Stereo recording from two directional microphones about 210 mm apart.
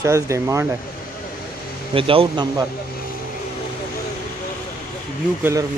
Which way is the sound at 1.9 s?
25° right (ahead or behind).